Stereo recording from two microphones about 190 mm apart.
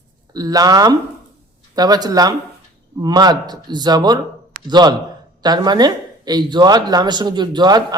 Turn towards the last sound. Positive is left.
turn(degrees=-20)  # may be behind; listen again after turning